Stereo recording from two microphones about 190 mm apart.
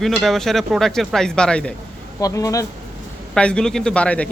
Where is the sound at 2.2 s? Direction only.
20° left (ahead or behind).